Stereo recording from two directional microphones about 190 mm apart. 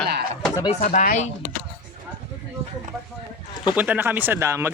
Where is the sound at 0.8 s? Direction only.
45° left (ahead or behind).